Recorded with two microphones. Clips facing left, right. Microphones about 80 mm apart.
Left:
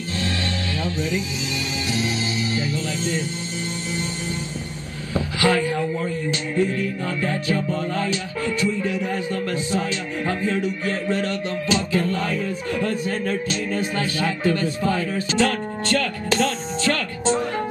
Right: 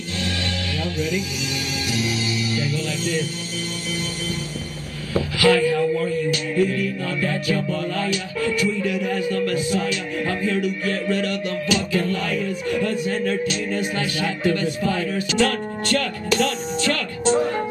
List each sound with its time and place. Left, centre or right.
2.5 s music: left
5.1 s music: left